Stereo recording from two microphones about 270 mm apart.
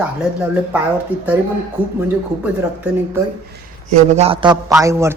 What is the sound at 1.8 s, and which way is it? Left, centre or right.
Speech, centre.